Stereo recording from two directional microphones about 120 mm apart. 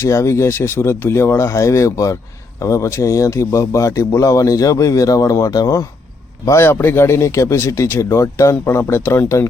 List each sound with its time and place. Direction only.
0.0 s a man's voice: 25° left (ahead or behind)